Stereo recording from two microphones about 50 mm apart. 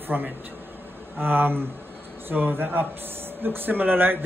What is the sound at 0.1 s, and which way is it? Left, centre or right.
Speech, right.